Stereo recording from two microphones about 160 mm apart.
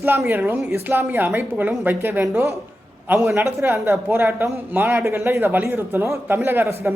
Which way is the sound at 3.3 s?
20° right (ahead or behind).